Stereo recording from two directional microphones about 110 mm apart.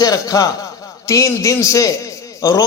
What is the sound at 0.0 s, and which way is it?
A man's voice, 35° left (ahead or behind).